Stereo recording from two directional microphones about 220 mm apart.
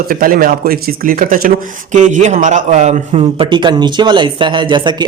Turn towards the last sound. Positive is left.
turn(degrees=-20)  # may be behind; listen again after turning